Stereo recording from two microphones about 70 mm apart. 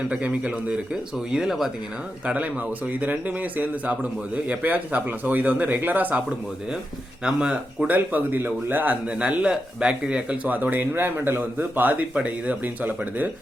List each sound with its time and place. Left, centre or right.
0.1 s speech: centre
1.3 s speech: centre
2.2 s speech: right
7.3 s speech: centre
7.9 s speech: right